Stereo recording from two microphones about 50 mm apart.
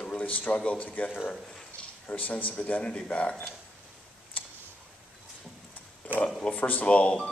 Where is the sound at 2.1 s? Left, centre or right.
Left.